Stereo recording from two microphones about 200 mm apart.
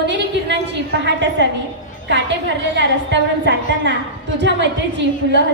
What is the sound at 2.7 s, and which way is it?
A woman's voice, 60° right (ahead or behind).